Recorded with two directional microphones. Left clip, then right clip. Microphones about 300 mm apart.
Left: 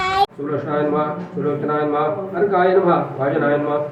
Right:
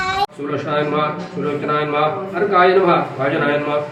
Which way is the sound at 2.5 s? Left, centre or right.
Right.